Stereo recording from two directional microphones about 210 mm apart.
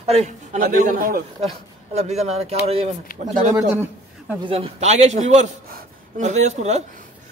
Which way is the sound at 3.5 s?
10° right (ahead or behind).